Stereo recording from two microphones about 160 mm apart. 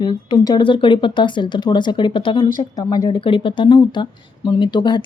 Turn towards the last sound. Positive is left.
turn(degrees=30)  # may be behind; listen again after turning